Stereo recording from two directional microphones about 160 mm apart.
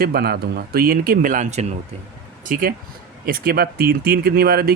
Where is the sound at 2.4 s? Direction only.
60° right (ahead or behind).